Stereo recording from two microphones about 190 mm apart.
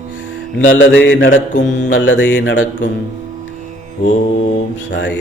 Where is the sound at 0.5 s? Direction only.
80° left.